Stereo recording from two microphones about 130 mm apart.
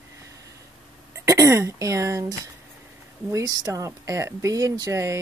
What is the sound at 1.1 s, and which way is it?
Speech, 25° right (ahead or behind).